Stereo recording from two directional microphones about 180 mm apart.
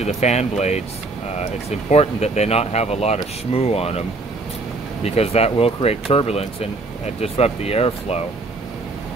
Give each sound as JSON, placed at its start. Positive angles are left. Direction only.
{"t": 0.0, "sound": "speech", "side_deg": 40}
{"t": 5.0, "sound": "speech", "side_deg": 35}